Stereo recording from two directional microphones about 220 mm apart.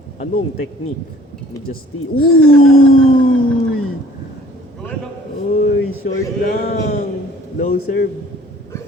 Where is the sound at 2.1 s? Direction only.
70° left (ahead or behind).